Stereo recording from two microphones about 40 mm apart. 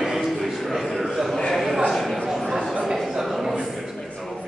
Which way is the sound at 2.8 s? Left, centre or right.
Centre.